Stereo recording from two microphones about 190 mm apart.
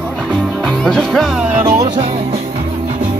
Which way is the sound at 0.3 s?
5° left (ahead or behind).